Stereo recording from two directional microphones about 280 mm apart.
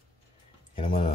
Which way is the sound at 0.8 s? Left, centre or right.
Centre.